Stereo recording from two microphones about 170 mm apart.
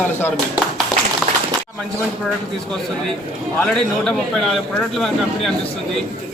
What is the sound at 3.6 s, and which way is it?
A man's voice, 5° left (ahead or behind).